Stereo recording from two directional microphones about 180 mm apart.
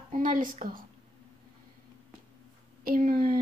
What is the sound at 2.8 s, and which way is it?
Speech, 55° right (ahead or behind).